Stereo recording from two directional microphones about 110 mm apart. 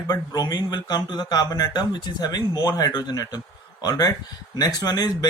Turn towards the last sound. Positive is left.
turn(degrees=35)  # may be behind; listen again after turning